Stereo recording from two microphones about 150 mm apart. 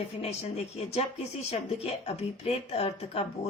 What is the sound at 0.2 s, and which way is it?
Speech, 45° left (ahead or behind).